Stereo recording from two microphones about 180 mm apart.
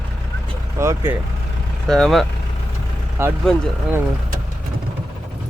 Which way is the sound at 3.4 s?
5° left (ahead or behind).